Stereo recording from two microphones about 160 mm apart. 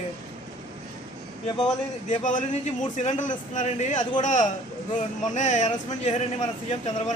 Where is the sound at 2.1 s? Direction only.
50° left (ahead or behind).